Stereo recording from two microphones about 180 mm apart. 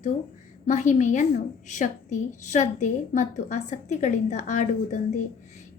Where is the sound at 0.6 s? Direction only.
40° left (ahead or behind).